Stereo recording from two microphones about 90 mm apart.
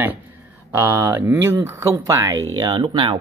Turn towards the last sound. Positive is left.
turn(degrees=-65)  # may be behind; listen again after turning